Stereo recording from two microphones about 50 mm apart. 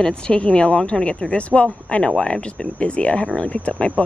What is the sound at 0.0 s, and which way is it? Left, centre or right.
Speech, left.